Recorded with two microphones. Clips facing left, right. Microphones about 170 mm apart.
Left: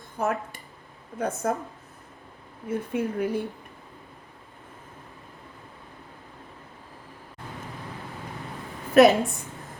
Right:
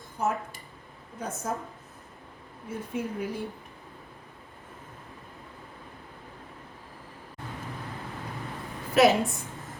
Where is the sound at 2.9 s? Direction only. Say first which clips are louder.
Left 4 dB; 60° left (ahead or behind).